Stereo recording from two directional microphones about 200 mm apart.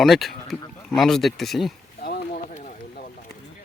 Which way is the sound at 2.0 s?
50° left (ahead or behind).